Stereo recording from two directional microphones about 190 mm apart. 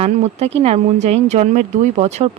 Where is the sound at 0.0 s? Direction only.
35° right (ahead or behind).